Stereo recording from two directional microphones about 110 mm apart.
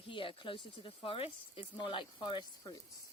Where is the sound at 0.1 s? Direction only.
50° left (ahead or behind).